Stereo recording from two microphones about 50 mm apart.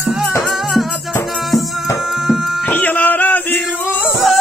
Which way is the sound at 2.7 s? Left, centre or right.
Left.